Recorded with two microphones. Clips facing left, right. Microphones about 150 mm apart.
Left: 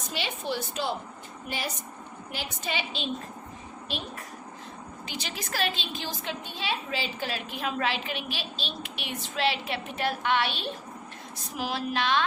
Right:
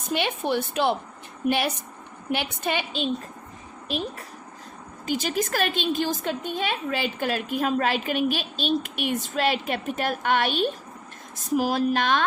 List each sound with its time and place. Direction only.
0.0 s a woman's voice: 55° right (ahead or behind)
1.5 s a woman's voice: 70° right (ahead or behind); by 3.1 s 50° right (ahead or behind)
5.0 s a woman's voice: 45° right (ahead or behind)